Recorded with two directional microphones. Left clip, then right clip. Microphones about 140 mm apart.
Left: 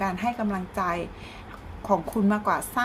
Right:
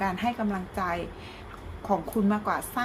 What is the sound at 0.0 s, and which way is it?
A woman's voice, 15° left (ahead or behind).